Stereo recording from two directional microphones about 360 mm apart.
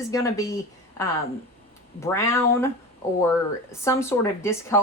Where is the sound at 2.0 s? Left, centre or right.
Centre.